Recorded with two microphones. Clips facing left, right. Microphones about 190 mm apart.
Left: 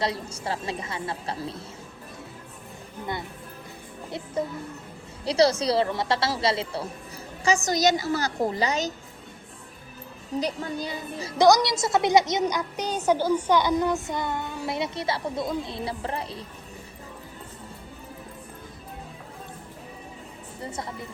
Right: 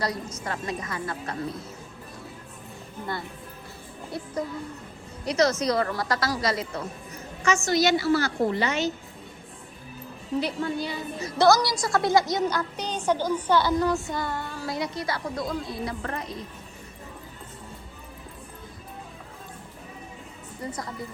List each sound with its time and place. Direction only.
0.0 s speech: 30° left (ahead or behind)
4.1 s speech: 20° left (ahead or behind)
7.7 s a woman's voice: 40° left (ahead or behind)
10.4 s a woman's voice: 40° left (ahead or behind)
11.3 s speech: 15° left (ahead or behind); by 16.5 s 30° left (ahead or behind)
20.7 s speech: 25° left (ahead or behind)